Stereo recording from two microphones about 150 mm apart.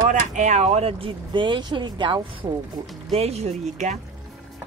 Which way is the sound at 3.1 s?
45° right (ahead or behind).